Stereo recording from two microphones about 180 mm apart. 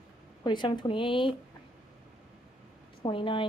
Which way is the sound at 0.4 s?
25° left (ahead or behind).